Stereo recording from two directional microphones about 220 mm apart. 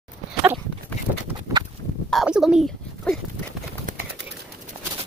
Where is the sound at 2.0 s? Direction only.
Centre (ahead or behind).